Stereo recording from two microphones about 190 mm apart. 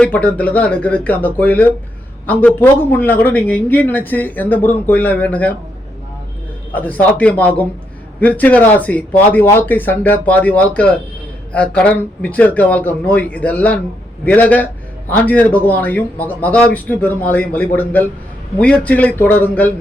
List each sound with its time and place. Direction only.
0.0 s speech: 5° left (ahead or behind)
6.7 s speech: 10° left (ahead or behind)